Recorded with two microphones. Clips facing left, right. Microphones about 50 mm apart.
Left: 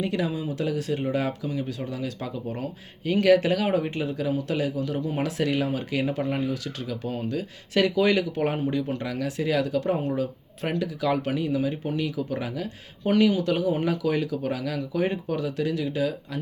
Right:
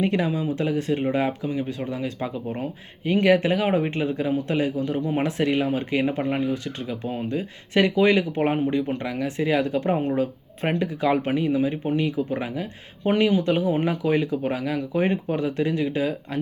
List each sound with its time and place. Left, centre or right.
0.0 s speech: right